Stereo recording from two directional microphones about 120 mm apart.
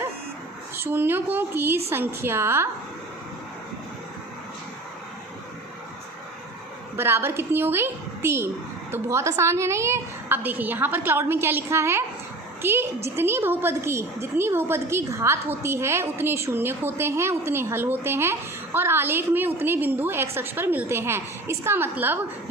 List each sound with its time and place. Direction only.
0.8 s a woman's voice: 20° right (ahead or behind)
6.9 s a woman's voice: 20° right (ahead or behind)